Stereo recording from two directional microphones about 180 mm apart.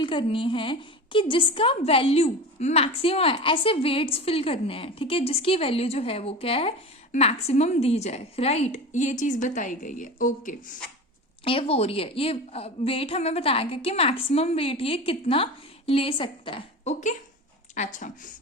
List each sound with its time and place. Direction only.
0.0 s a woman's voice: 30° left (ahead or behind); by 10.8 s 45° left (ahead or behind)
11.4 s a woman's voice: 30° left (ahead or behind)
16.9 s speech: 40° left (ahead or behind)